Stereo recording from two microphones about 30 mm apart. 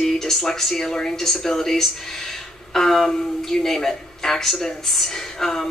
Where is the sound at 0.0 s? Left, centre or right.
Centre.